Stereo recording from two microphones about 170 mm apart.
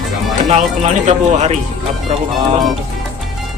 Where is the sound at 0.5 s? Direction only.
40° right (ahead or behind).